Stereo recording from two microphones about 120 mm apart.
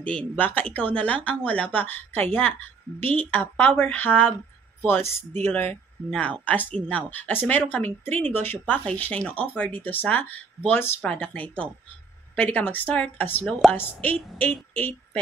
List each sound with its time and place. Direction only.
0.0 s speech: 10° left (ahead or behind)
5.4 s a woman's voice: 15° left (ahead or behind)